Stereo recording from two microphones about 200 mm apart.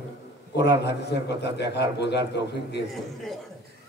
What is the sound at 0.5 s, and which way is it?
A man's voice, 60° left (ahead or behind).